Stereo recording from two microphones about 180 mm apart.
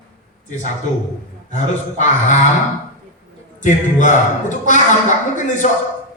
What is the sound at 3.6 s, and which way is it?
A man's voice, 45° left (ahead or behind).